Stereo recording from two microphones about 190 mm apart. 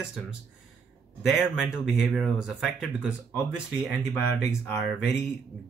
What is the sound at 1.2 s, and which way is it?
Speech, centre (ahead or behind).